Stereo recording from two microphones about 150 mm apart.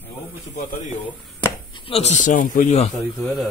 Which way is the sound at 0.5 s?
55° left (ahead or behind).